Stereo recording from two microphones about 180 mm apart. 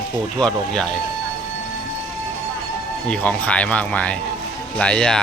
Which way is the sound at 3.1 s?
5° left (ahead or behind).